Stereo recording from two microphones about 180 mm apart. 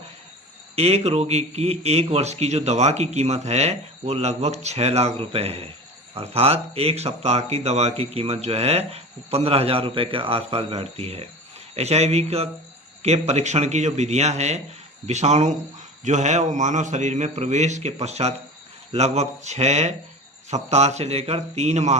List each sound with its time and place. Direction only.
0.8 s speech: 35° right (ahead or behind)